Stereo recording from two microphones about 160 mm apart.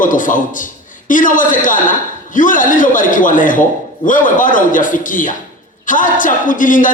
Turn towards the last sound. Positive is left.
turn(degrees=55)  # may be behind; listen again after turning